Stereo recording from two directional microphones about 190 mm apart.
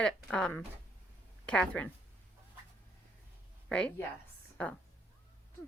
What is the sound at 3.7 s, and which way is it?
Speech, 5° left (ahead or behind).